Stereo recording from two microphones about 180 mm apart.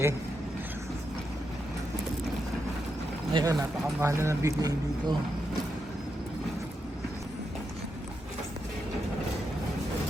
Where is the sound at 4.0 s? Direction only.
15° right (ahead or behind).